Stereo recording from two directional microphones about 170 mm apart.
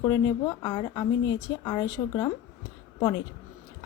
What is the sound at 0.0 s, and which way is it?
A woman's voice, 20° left (ahead or behind).